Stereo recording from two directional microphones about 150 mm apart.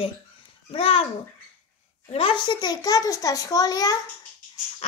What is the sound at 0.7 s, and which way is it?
Speech, 40° left (ahead or behind).